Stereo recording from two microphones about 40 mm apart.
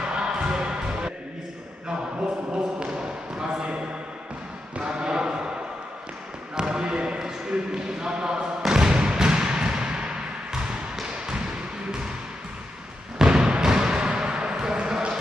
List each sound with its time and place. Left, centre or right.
0.0 s music: right
3.0 s basketball bounce: right
4.7 s basketball bounce: right
6.5 s basketball bounce: centre
13.2 s a sound: centre